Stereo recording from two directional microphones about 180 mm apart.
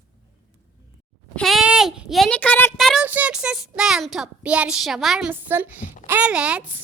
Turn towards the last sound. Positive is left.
turn(degrees=-5)  # may be behind; listen again after turning